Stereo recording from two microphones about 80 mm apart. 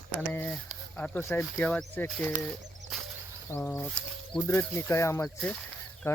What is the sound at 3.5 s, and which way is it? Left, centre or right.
Speech, left.